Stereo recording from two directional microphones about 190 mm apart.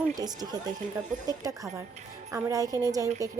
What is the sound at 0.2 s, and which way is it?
A woman's voice, 20° right (ahead or behind).